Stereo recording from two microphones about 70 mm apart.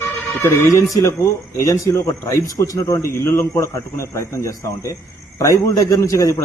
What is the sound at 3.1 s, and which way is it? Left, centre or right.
A man's voice, left.